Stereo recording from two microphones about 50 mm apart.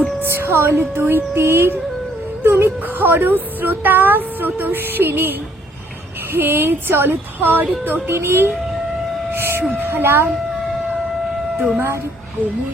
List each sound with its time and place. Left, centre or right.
0.2 s speech: right
8.1 s speech: right
9.3 s vehicle: right
9.7 s speech: right